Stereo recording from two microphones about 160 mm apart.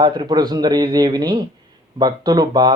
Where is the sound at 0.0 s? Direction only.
30° right (ahead or behind).